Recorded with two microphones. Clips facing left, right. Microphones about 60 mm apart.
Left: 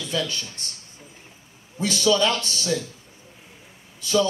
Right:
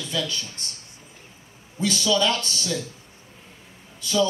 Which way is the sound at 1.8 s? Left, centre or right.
Left.